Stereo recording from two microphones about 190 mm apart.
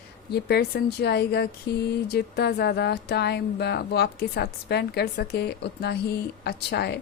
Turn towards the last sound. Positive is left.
turn(degrees=60)  # may be behind; listen again after turning